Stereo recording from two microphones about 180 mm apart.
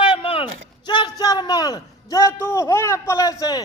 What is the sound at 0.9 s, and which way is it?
A man's voice, 25° left (ahead or behind).